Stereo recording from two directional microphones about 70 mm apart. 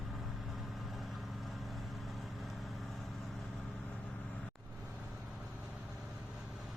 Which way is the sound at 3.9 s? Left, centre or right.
Centre.